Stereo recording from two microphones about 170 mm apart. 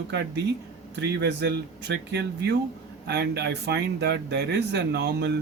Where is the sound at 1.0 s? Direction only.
90° right.